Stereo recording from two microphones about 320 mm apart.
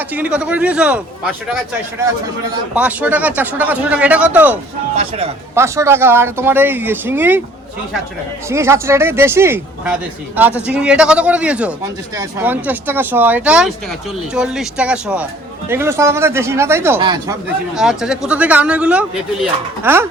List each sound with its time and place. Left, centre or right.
0.1 s speech: centre
2.7 s speech: centre
4.9 s speech: centre
8.4 s speech: centre